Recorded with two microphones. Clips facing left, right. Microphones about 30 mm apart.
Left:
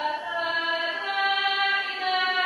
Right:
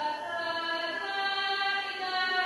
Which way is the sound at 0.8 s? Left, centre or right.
Left.